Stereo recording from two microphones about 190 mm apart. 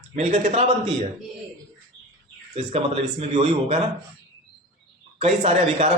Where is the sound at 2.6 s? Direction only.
40° right (ahead or behind).